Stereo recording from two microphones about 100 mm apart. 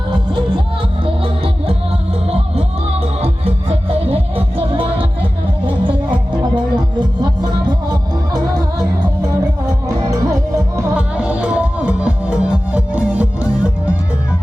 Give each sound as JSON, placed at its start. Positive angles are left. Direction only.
{"t": 1.0, "sound": "music", "side_deg": -65}
{"t": 2.2, "sound": "music", "side_deg": -85}
{"t": 10.9, "sound": "music", "side_deg": -10}